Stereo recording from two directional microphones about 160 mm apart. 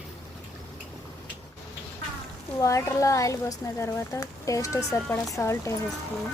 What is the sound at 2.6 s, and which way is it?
Speech, 20° left (ahead or behind).